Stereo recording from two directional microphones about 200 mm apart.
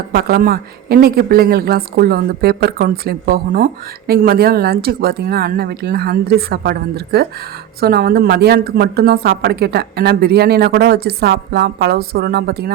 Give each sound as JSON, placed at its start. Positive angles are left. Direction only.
{"t": 0.1, "sound": "speech", "side_deg": -50}